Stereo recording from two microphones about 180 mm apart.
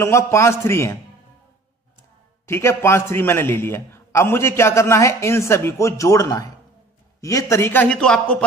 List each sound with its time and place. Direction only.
0.0 s a man's voice: 15° left (ahead or behind)
2.4 s a man's voice: 15° left (ahead or behind)